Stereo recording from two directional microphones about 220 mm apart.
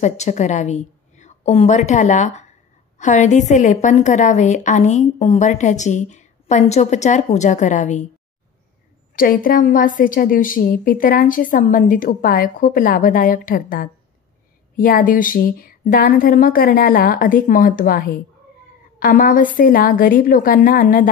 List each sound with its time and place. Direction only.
0.0 s a woman's voice: 30° left (ahead or behind)
9.1 s a woman's voice: 40° left (ahead or behind)